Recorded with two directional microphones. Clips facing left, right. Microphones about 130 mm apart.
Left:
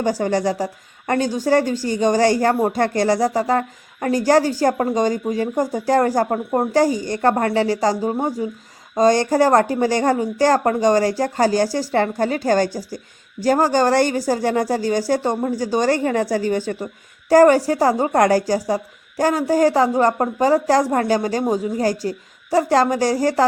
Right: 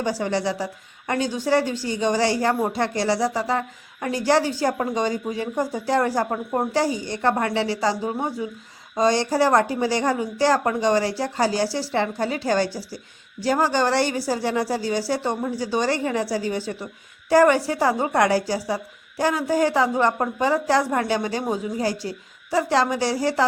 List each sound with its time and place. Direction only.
0.0 s a woman's voice: 45° left (ahead or behind)